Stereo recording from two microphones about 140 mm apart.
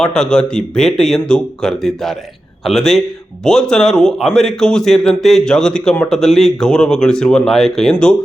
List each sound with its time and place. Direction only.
0.0 s a man's voice: 5° left (ahead or behind)